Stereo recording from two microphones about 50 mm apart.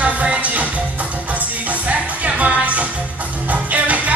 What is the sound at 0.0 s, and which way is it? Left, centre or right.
Music, right.